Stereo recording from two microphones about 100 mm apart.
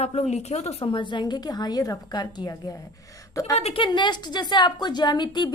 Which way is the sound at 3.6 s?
65° left (ahead or behind).